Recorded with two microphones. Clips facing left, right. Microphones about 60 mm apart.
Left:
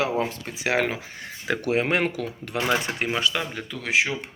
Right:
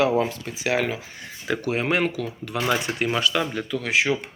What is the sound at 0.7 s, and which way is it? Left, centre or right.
Speech, left.